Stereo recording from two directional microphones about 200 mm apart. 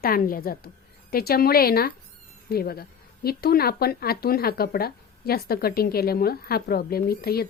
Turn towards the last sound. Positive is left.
turn(degrees=50)  # may be behind; listen again after turning